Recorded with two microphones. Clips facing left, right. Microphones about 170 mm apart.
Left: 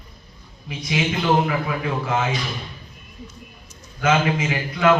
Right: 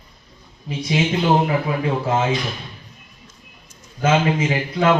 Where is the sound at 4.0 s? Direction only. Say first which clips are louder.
Right 2 dB; 30° right (ahead or behind).